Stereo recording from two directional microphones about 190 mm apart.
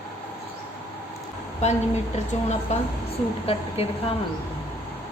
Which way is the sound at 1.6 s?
35° left (ahead or behind).